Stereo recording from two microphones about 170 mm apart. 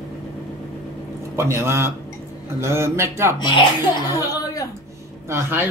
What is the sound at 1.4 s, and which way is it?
A man's voice, 15° right (ahead or behind).